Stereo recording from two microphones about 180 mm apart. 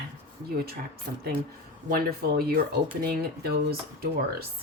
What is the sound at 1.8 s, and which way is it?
A woman's voice, 55° right (ahead or behind).